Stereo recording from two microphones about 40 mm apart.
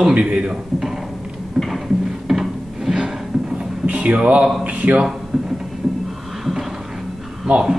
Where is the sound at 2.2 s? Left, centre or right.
Centre.